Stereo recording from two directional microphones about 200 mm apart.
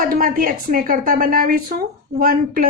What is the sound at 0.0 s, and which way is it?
A woman's voice, 45° right (ahead or behind).